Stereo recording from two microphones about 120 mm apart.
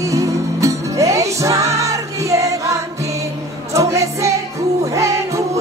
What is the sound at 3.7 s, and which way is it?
Music, 25° right (ahead or behind).